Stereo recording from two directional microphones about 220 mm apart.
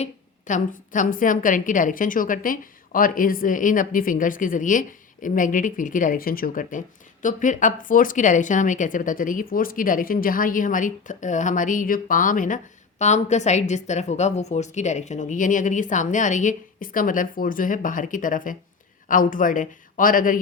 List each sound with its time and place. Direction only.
0.0 s a woman's voice: 35° left (ahead or behind)